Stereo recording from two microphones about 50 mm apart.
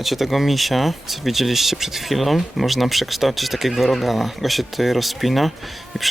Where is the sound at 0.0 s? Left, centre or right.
Centre.